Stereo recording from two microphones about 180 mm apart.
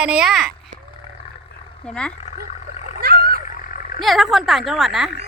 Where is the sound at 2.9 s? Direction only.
55° right (ahead or behind).